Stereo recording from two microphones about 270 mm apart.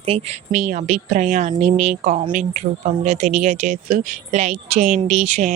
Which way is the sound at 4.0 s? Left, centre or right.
Right.